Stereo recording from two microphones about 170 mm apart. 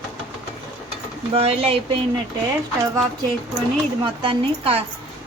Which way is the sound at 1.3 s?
35° right (ahead or behind).